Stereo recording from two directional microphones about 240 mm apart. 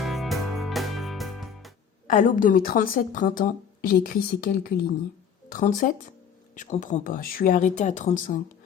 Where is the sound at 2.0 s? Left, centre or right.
Left.